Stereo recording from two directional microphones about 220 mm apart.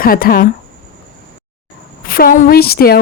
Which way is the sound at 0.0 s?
40° left (ahead or behind).